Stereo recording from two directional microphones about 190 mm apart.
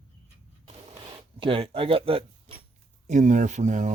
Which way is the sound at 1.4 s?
30° right (ahead or behind).